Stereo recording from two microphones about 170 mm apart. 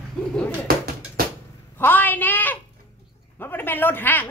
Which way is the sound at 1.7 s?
10° left (ahead or behind).